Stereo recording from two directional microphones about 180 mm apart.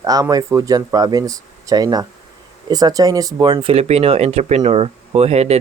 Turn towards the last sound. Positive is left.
turn(degrees=-35)  # may be behind; listen again after turning